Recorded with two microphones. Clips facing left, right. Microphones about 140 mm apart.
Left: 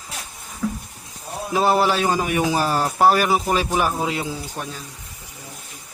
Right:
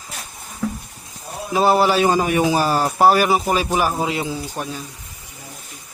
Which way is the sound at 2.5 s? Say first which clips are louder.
Right 2 dB; 5° right (ahead or behind).